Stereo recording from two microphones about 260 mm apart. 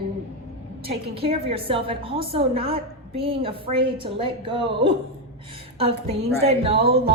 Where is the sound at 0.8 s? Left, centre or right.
Right.